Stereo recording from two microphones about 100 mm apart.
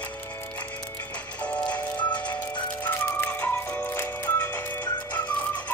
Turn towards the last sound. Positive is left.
turn(degrees=15)  # may be behind; listen again after turning